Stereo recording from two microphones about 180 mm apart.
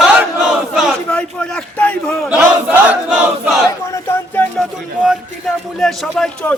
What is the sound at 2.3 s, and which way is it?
Battle cry, 5° right (ahead or behind).